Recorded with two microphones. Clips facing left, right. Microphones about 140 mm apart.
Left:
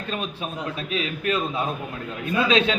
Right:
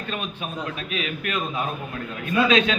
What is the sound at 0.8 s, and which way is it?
A man's voice, 30° left (ahead or behind).